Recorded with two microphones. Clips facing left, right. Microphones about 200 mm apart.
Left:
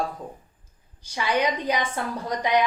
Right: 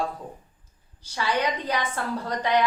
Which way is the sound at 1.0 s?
15° left (ahead or behind).